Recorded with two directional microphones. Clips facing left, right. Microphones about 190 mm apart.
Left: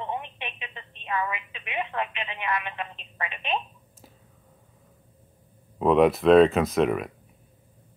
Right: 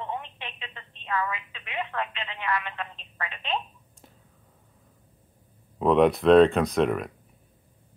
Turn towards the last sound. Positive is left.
turn(degrees=5)  # may be behind; listen again after turning